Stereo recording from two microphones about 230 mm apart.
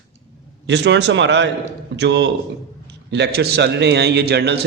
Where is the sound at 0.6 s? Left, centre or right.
Right.